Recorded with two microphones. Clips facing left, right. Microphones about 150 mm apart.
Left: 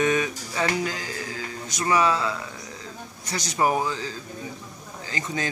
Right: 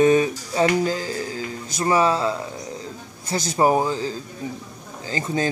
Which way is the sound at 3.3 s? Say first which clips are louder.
Right 5 dB; 30° right (ahead or behind).